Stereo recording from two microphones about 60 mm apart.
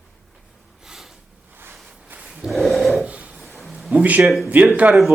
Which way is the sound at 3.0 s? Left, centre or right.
Right.